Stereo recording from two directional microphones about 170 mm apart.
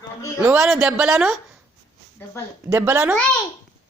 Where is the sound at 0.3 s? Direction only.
5° right (ahead or behind).